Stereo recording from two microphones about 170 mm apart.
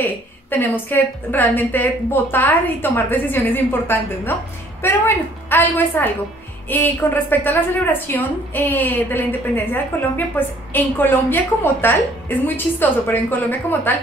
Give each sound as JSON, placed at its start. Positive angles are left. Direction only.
{"t": 0.0, "sound": "a woman's voice", "side_deg": 10}